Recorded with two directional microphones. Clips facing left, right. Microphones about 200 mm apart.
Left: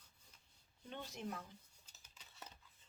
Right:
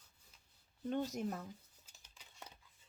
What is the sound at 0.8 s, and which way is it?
Speech, 45° right (ahead or behind).